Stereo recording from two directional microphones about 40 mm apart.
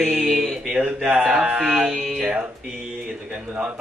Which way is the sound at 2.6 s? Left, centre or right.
Centre.